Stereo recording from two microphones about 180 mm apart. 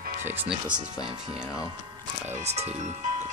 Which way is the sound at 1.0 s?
20° left (ahead or behind).